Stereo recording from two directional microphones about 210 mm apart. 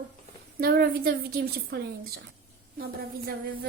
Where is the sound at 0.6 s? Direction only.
45° right (ahead or behind).